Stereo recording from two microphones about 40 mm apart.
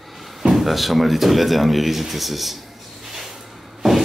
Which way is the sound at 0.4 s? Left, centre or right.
Centre.